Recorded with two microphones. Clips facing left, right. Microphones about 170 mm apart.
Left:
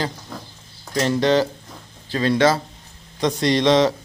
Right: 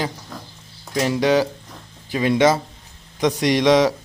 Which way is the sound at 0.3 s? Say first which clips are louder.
Left 1 dB; 5° left (ahead or behind).